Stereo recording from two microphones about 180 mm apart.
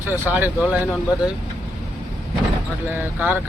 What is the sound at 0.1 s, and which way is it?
Speech, 10° right (ahead or behind).